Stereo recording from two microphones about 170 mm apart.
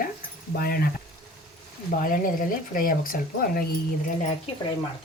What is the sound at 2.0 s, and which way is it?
Speech, 55° left (ahead or behind).